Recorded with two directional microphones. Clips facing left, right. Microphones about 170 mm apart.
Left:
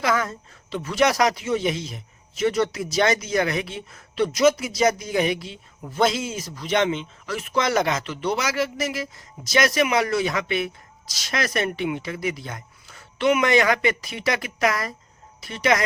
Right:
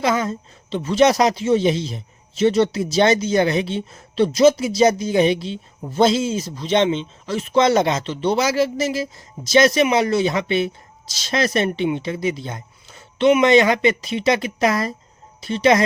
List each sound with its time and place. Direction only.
0.0 s speech: 20° right (ahead or behind)